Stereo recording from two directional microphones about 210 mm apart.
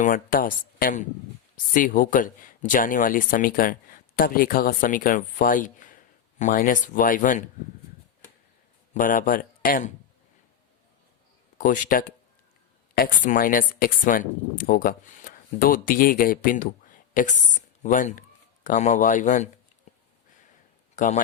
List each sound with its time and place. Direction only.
0.0 s speech: 40° left (ahead or behind)
8.9 s speech: 40° left (ahead or behind)
11.5 s speech: 35° left (ahead or behind)
20.9 s speech: 35° left (ahead or behind)